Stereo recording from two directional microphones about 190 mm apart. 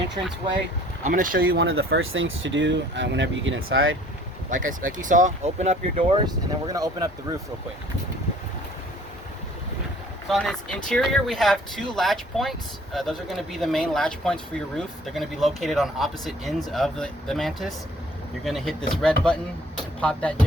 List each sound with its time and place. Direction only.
1.0 s speech: 45° right (ahead or behind)
1.6 s speech: 90° right
4.4 s speech: 45° right (ahead or behind)
6.7 s speech: 20° right (ahead or behind)
10.2 s speech: 5° left (ahead or behind)